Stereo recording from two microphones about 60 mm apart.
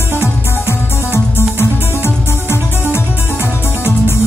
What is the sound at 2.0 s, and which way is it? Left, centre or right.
Music, left.